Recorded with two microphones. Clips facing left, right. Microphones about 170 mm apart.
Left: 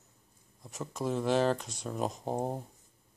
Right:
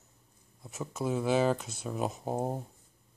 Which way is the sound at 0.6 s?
Centre (ahead or behind).